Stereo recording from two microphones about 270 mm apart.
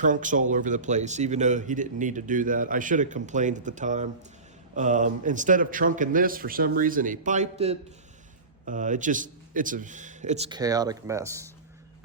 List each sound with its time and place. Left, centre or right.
0.0 s a man's voice: right; by 11.5 s centre